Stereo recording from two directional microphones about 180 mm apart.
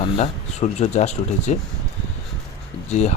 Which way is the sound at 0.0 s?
40° left (ahead or behind).